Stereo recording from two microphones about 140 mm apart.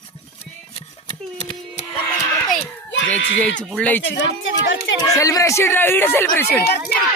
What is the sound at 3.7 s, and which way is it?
Speech, 10° left (ahead or behind).